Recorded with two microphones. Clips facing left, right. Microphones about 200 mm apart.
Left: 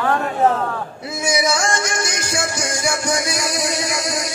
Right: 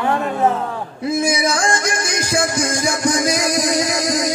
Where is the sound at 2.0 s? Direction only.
35° right (ahead or behind).